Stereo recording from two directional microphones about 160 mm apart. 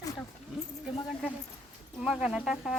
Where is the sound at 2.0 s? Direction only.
5° right (ahead or behind).